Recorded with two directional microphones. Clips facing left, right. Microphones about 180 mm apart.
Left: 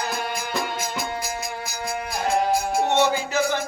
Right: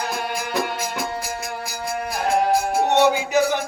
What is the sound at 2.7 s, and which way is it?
Music, 10° right (ahead or behind).